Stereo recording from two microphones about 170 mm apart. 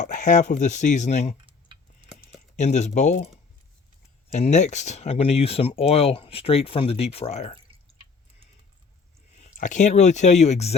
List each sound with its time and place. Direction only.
0.0 s speech: 45° left (ahead or behind)
1.5 s tick-tock: 30° right (ahead or behind)
2.6 s speech: 45° left (ahead or behind)
4.3 s speech: 45° left (ahead or behind)
9.4 s speech: 45° left (ahead or behind)